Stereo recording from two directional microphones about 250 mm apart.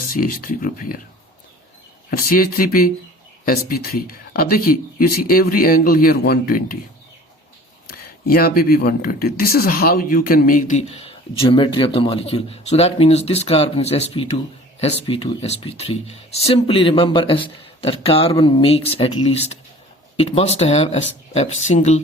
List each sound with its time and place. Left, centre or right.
0.1 s speech: left
2.0 s speech: left
7.9 s speech: left
20.1 s speech: left